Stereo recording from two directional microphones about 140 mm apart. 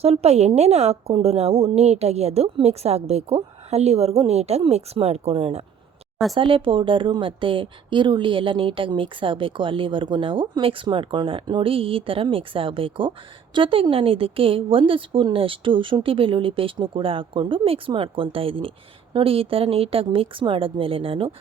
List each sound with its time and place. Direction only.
0.0 s a woman's voice: 45° right (ahead or behind)